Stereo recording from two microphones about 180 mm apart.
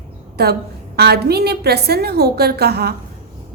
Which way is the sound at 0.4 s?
60° right (ahead or behind).